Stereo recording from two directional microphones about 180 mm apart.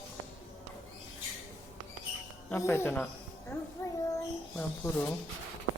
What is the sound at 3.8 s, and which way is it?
Child singing, 15° left (ahead or behind).